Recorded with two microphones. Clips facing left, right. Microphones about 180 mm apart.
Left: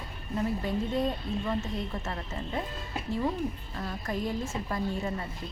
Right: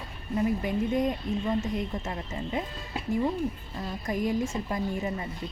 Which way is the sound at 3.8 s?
15° right (ahead or behind).